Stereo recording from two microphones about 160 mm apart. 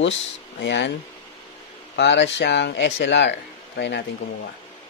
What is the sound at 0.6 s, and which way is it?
Speech, 90° left.